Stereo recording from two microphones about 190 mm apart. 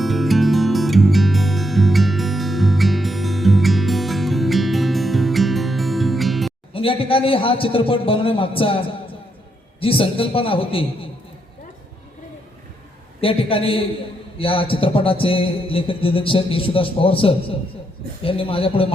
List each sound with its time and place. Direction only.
0.0 s music: centre (ahead or behind)
6.7 s a man's voice: 30° left (ahead or behind)
9.8 s a man's voice: 30° left (ahead or behind)
13.2 s a man's voice: 30° left (ahead or behind)